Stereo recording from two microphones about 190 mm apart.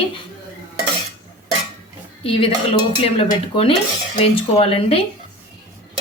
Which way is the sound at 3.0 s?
30° left (ahead or behind).